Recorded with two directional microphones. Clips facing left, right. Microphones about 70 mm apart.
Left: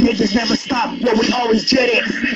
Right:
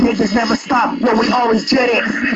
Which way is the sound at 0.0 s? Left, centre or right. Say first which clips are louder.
Right 1 dB; right.